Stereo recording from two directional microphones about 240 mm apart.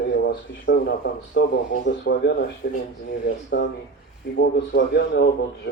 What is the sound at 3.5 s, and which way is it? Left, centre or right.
A man's voice, left.